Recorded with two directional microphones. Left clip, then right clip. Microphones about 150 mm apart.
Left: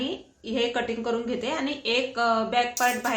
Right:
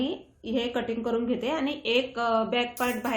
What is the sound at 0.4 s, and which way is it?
A woman's voice, 65° right (ahead or behind).